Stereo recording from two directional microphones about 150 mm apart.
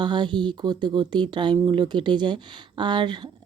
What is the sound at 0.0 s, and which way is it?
Speech, 30° right (ahead or behind).